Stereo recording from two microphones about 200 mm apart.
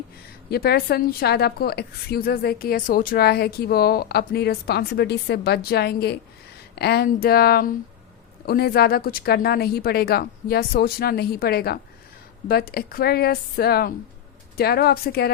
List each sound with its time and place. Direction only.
0.5 s a woman's voice: 50° left (ahead or behind)